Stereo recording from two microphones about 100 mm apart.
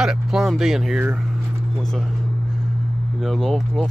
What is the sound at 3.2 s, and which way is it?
Speech, centre (ahead or behind).